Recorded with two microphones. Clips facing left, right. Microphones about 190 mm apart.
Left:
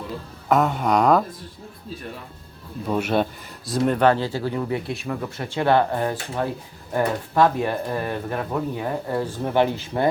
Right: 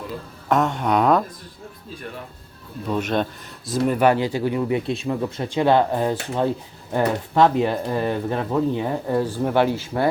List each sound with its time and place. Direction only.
0.4 s a sound: 5° left (ahead or behind)
2.8 s speech: 10° left (ahead or behind)
3.7 s speech: 5° right (ahead or behind); by 8.9 s 20° right (ahead or behind)
9.1 s speech: 10° right (ahead or behind)